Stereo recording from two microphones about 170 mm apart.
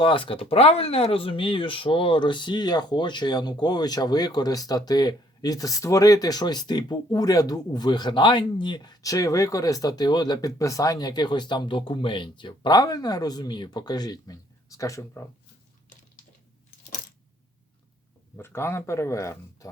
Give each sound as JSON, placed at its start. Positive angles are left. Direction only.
{"t": 0.0, "sound": "speech", "side_deg": 30}
{"t": 18.3, "sound": "speech", "side_deg": 15}